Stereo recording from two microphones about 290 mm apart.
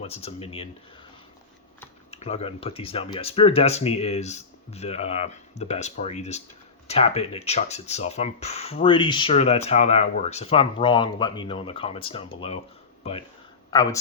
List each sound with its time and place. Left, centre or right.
0.0 s speech: centre
2.0 s speech: left